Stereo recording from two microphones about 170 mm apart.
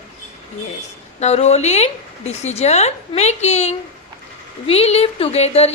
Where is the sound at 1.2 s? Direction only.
40° left (ahead or behind).